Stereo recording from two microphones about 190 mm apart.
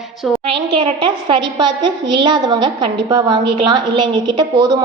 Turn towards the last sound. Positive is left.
turn(degrees=-20)  # may be behind; listen again after turning